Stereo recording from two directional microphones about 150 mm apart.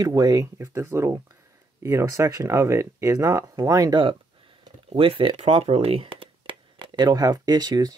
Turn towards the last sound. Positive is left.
turn(degrees=-25)  # may be behind; listen again after turning